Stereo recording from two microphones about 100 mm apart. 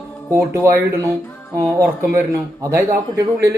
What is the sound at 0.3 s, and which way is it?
A man's voice, 30° right (ahead or behind).